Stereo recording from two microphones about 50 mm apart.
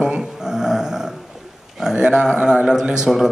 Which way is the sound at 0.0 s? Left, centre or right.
Centre.